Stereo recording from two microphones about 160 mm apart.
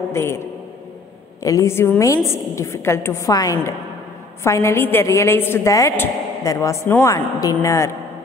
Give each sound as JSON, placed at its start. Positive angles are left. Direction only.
{"t": 0.1, "sound": "a woman's voice", "side_deg": 15}
{"t": 1.4, "sound": "a woman's voice", "side_deg": 20}